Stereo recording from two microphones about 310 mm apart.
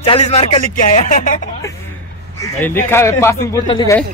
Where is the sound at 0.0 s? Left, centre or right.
Centre.